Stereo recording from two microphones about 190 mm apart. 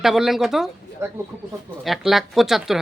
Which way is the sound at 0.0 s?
Centre (ahead or behind).